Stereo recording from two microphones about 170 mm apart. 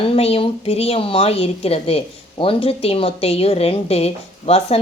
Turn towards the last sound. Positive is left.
turn(degrees=35)  # may be behind; listen again after turning